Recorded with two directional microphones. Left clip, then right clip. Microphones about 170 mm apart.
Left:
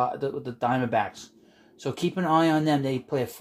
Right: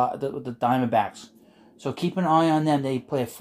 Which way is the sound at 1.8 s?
5° right (ahead or behind).